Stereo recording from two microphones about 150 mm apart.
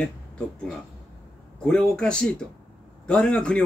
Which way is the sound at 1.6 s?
5° left (ahead or behind).